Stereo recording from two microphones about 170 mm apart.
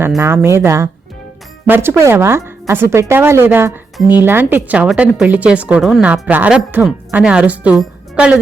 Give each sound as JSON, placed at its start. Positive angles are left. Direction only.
{"t": 0.2, "sound": "a woman's voice", "side_deg": -15}